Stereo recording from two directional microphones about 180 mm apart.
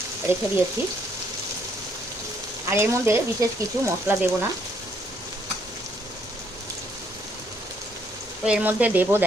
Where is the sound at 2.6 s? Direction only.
15° right (ahead or behind).